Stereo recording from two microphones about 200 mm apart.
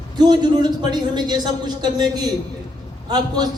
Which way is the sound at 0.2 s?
20° right (ahead or behind).